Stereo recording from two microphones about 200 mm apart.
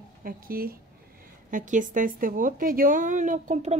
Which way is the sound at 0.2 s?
45° right (ahead or behind).